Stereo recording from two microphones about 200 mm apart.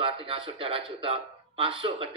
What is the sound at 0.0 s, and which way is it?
A man's voice, 25° right (ahead or behind).